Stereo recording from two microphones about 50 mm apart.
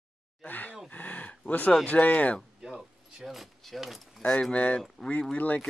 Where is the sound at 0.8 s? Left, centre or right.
Left.